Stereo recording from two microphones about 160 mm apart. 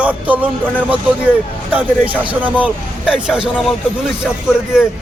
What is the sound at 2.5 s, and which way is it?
Speech, 5° right (ahead or behind).